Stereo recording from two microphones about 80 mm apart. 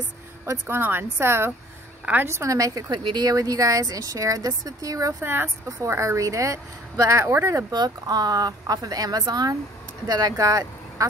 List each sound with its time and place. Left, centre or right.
0.5 s speech: right
2.9 s speech: right
5.2 s speech: right
5.7 s speech: right
7.7 s speech: right